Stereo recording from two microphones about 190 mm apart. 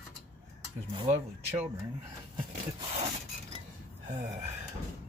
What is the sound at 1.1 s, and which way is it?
Speech, 35° right (ahead or behind).